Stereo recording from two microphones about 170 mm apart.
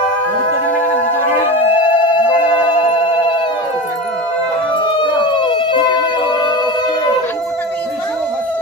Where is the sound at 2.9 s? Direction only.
30° left (ahead or behind).